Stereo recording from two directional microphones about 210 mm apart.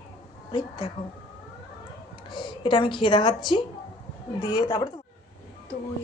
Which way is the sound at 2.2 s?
20° left (ahead or behind).